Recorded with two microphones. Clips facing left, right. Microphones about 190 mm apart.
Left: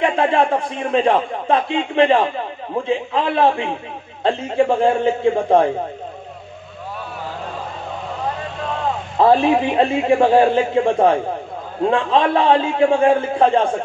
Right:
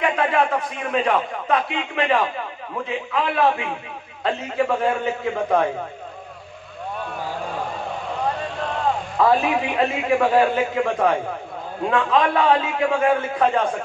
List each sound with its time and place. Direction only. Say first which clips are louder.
0.0 s a man's voice: left 4 dB; 30° left (ahead or behind)
9.2 s a man's voice: left 5 dB; 30° left (ahead or behind)